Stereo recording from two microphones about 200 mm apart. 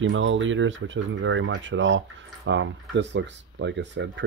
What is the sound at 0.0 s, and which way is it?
Speech, 70° right (ahead or behind).